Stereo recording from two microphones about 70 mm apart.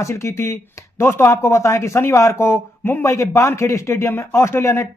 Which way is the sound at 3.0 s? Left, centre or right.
Left.